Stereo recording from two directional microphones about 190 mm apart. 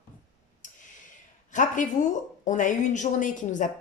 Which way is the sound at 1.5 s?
40° left (ahead or behind).